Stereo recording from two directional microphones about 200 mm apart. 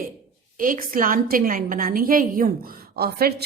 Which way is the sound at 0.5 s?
45° right (ahead or behind).